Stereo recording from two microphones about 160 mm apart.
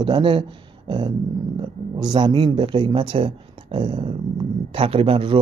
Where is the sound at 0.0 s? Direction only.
30° right (ahead or behind).